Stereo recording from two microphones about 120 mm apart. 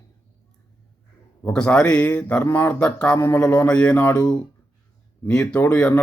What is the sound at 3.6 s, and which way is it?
A man's voice, 10° left (ahead or behind).